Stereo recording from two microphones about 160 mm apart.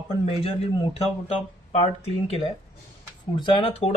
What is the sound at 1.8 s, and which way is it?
Speech, 40° left (ahead or behind).